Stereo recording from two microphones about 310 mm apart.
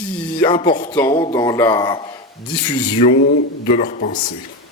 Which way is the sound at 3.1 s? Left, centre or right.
Left.